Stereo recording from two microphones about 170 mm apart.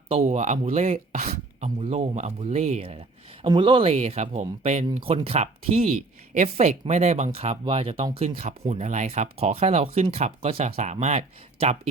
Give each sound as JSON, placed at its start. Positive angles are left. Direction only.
{"t": 0.3, "sound": "speech", "side_deg": -40}